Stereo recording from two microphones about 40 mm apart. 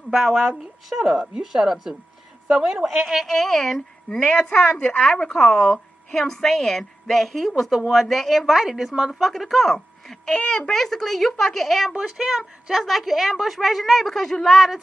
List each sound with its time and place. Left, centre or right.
0.2 s a woman's voice: centre
0.9 s speech: centre
3.2 s a woman's voice: centre
4.2 s speech: left
4.8 s a woman's voice: centre
8.5 s speech: centre
9.2 s a woman's voice: centre
12.2 s a woman's voice: centre